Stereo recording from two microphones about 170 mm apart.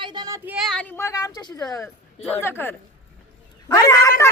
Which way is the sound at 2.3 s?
10° left (ahead or behind).